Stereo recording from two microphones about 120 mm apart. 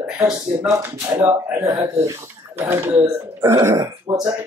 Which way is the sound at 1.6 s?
25° right (ahead or behind).